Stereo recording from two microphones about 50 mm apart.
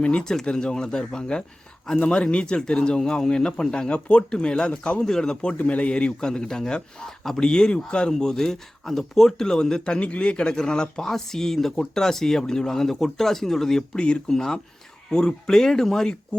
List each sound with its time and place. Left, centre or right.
0.0 s a man's voice: centre